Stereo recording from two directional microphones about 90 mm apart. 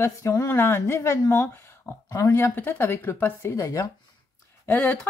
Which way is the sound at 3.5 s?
35° left (ahead or behind).